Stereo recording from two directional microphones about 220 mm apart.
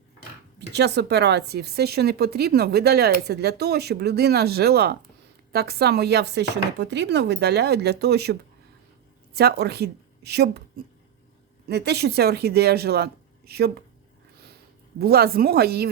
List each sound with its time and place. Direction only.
0.7 s speech: 50° right (ahead or behind)
11.7 s speech: 50° right (ahead or behind)
14.9 s speech: 45° right (ahead or behind)